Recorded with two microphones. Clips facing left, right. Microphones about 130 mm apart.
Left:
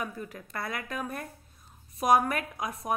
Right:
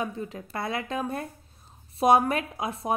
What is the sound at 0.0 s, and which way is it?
A woman's voice, 25° right (ahead or behind).